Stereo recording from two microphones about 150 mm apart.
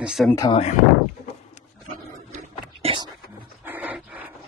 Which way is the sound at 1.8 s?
50° right (ahead or behind).